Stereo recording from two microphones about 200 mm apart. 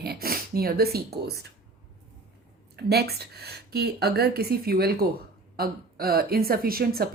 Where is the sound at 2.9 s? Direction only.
55° right (ahead or behind).